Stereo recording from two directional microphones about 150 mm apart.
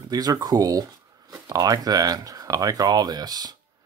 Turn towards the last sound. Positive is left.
turn(degrees=-25)  # may be behind; listen again after turning